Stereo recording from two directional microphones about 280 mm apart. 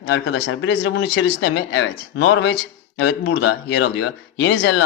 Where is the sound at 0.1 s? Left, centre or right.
Left.